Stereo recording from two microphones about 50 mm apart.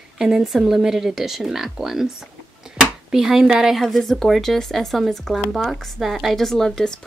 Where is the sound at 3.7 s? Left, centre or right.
Centre.